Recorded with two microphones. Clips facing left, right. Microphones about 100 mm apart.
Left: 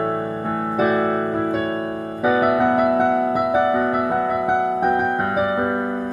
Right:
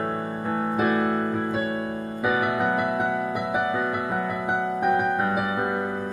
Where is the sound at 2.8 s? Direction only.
70° left (ahead or behind).